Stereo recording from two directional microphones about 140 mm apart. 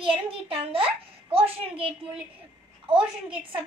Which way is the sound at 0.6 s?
40° right (ahead or behind).